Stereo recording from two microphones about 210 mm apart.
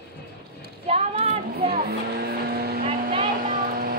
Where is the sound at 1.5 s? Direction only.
45° right (ahead or behind).